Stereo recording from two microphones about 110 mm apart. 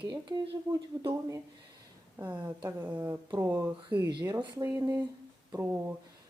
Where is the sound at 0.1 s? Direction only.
45° right (ahead or behind).